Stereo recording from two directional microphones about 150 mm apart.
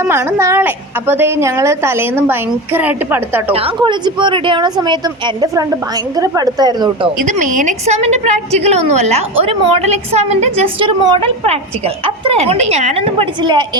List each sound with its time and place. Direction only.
0.0 s a woman's voice: 15° right (ahead or behind)
3.5 s a woman's voice: 40° right (ahead or behind)
7.2 s a woman's voice: 60° right (ahead or behind); by 13.7 s 30° right (ahead or behind)